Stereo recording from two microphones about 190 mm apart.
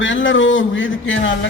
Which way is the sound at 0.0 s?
85° left.